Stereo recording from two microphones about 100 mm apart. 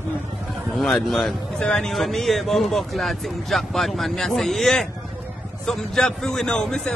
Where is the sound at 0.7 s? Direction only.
Centre (ahead or behind).